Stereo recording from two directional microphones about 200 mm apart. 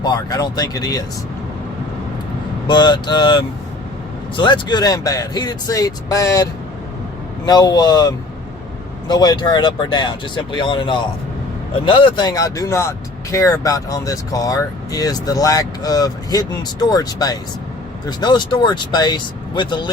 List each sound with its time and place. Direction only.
0.0 s speech: 20° left (ahead or behind)
2.6 s speech: 20° left (ahead or behind)